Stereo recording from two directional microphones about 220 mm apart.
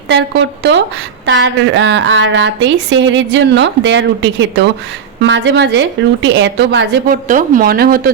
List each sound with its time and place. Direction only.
0.1 s a woman's voice: 55° right (ahead or behind)
7.3 s speech: 35° right (ahead or behind)